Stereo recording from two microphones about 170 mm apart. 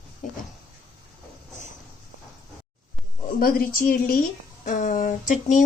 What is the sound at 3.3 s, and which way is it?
Speech, 60° left (ahead or behind).